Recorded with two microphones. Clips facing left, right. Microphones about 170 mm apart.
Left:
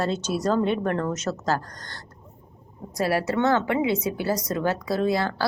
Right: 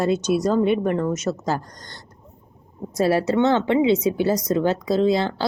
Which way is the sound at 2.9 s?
25° right (ahead or behind).